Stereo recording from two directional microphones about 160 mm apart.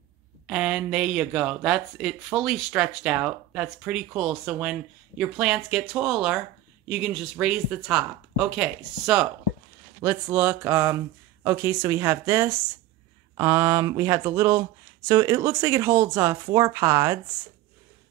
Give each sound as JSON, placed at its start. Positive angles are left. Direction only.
{"t": 0.5, "sound": "speech", "side_deg": -5}